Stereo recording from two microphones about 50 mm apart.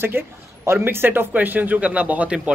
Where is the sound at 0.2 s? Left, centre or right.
Right.